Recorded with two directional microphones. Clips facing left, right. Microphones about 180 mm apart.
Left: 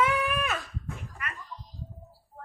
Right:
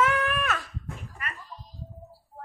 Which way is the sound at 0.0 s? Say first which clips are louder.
Right 1 dB; 10° left (ahead or behind).